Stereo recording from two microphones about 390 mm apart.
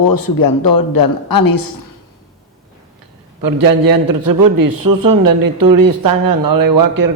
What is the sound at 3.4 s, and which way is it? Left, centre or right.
A man's voice, right.